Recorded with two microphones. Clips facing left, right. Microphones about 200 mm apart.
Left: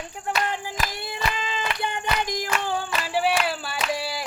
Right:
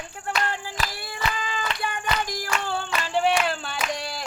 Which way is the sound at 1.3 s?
20° left (ahead or behind).